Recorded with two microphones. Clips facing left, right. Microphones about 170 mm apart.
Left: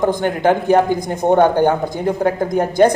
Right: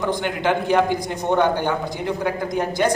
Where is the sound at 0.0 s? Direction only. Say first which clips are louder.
Left 6 dB; 45° left (ahead or behind).